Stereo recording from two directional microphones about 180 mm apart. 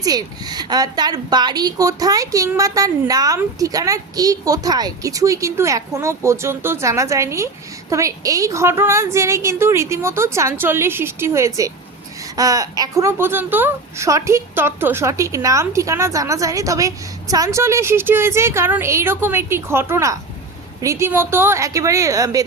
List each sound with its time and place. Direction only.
0.0 s speech: 20° right (ahead or behind)